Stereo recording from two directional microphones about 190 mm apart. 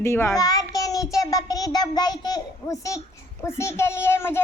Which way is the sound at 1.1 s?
20° left (ahead or behind).